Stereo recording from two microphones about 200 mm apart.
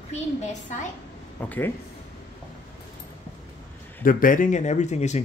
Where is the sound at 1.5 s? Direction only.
10° left (ahead or behind).